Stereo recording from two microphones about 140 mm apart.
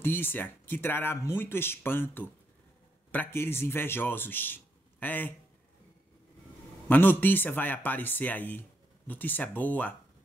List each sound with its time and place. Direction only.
0.0 s speech: 15° left (ahead or behind)
6.9 s speech: 15° left (ahead or behind)